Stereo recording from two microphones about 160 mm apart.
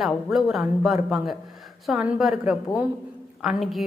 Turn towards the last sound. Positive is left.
turn(degrees=0)  # may be behind; listen again after turning